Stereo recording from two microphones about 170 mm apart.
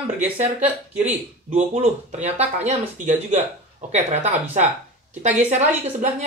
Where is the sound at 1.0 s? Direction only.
40° right (ahead or behind).